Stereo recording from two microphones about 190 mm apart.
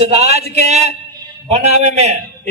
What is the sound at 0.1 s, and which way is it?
A man's voice, 35° right (ahead or behind).